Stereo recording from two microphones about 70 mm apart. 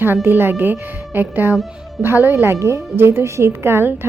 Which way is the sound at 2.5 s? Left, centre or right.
Right.